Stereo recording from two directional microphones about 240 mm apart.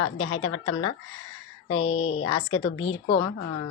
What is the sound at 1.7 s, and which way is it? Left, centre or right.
Speech, left.